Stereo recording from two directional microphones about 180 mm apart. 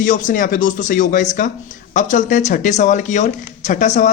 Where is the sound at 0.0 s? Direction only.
50° left (ahead or behind).